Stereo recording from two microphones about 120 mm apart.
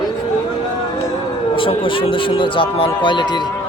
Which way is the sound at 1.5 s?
45° left (ahead or behind).